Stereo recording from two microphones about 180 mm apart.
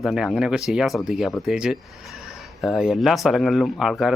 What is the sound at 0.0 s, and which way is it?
Speech, centre (ahead or behind).